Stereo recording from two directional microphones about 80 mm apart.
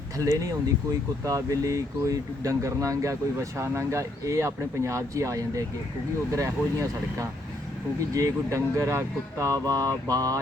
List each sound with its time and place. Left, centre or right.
0.2 s speech: right